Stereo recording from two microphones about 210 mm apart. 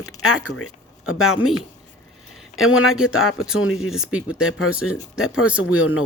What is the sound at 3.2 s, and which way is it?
Speech, 80° left.